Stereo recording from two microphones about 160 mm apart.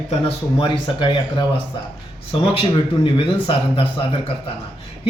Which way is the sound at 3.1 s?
35° left (ahead or behind).